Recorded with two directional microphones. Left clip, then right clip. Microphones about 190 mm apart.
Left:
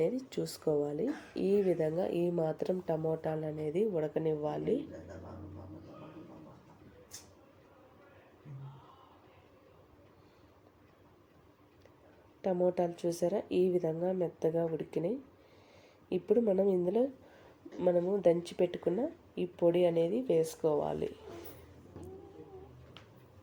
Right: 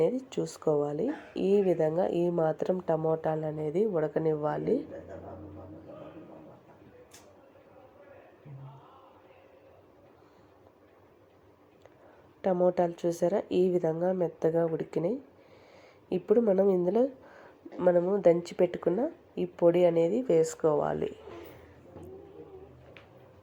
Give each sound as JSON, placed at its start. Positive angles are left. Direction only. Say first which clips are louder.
{"t": 0.0, "sound": "speech", "louder": "right 5 dB", "side_deg": 5}
{"t": 4.1, "sound": "speech", "louder": "right 5 dB", "side_deg": -35}
{"t": 12.4, "sound": "speech", "louder": "right 5 dB", "side_deg": 0}
{"t": 17.9, "sound": "speech", "louder": "right 5 dB", "side_deg": -15}
{"t": 18.2, "sound": "speech", "louder": "right 5 dB", "side_deg": 0}
{"t": 20.0, "sound": "speech", "louder": "right 5 dB", "side_deg": -35}
{"t": 20.2, "sound": "speech", "louder": "right 5 dB", "side_deg": 5}